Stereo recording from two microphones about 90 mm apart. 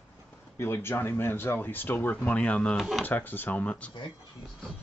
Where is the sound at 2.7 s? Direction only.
Centre (ahead or behind).